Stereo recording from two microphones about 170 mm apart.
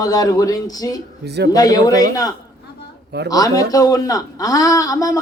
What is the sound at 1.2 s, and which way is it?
Speech, 80° right.